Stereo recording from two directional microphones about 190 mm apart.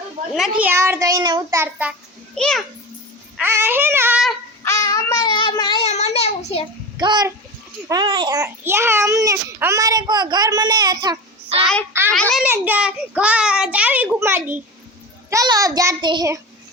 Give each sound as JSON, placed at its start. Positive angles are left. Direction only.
{"t": 0.3, "sound": "a child's voice", "side_deg": -5}
{"t": 2.3, "sound": "a child's voice", "side_deg": 5}
{"t": 3.3, "sound": "child singing", "side_deg": -10}
{"t": 4.6, "sound": "child singing", "side_deg": 20}
{"t": 5.8, "sound": "child singing", "side_deg": 35}
{"t": 7.0, "sound": "a child's voice", "side_deg": -20}
{"t": 11.6, "sound": "a child's voice", "side_deg": 5}
{"t": 12.5, "sound": "a child's voice", "side_deg": -10}